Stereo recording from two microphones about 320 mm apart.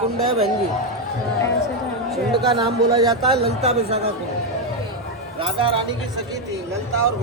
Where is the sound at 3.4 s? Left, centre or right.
Centre.